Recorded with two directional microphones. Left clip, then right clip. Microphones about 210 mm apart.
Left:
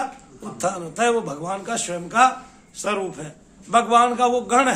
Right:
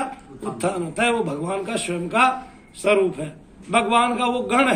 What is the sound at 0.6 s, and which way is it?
A man's voice, 20° left (ahead or behind).